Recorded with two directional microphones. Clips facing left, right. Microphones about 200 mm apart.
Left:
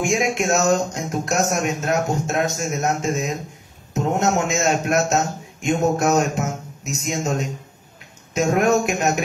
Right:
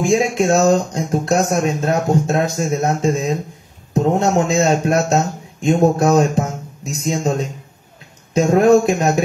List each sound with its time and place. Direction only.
0.0 s a man's voice: 30° right (ahead or behind)